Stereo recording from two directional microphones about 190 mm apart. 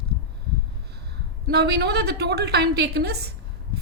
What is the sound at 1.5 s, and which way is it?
A woman's voice, 60° right (ahead or behind).